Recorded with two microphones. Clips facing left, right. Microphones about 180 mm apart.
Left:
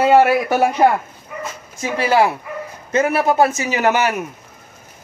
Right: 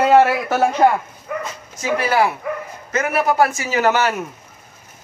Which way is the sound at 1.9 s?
25° left (ahead or behind).